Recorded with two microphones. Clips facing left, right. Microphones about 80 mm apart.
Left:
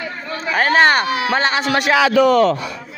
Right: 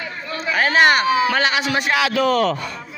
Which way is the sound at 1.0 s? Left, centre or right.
Left.